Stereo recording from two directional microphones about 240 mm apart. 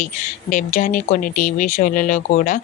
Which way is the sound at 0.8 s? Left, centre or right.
Left.